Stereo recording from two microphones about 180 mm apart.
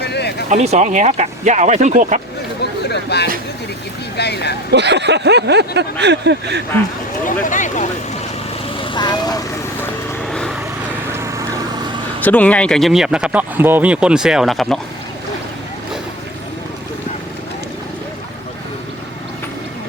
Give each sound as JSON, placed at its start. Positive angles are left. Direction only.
{"t": 0.0, "sound": "a sound", "side_deg": 65}
{"t": 0.5, "sound": "speech", "side_deg": -40}
{"t": 2.9, "sound": "a sound", "side_deg": 65}
{"t": 4.2, "sound": "speech", "side_deg": 65}
{"t": 4.7, "sound": "a sound", "side_deg": -70}
{"t": 7.4, "sound": "speech", "side_deg": 45}
{"t": 8.8, "sound": "vehicle", "side_deg": 25}
{"t": 10.2, "sound": "vehicle", "side_deg": 5}
{"t": 11.2, "sound": "vehicle", "side_deg": -15}
{"t": 12.2, "sound": "speech", "side_deg": 10}